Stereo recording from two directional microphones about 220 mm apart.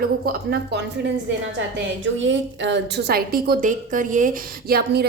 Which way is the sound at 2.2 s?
55° right (ahead or behind).